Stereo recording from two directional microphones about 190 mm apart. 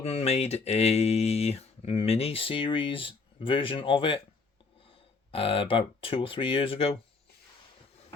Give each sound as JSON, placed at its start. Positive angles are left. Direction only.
{"t": 0.0, "sound": "speech", "side_deg": 35}
{"t": 5.3, "sound": "speech", "side_deg": 30}